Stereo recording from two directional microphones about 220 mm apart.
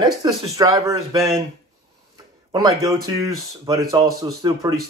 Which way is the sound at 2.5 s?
15° right (ahead or behind).